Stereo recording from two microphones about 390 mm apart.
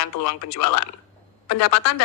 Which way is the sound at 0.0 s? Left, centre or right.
Left.